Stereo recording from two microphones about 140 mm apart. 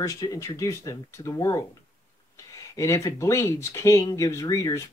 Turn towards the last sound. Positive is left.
turn(degrees=25)  # may be behind; listen again after turning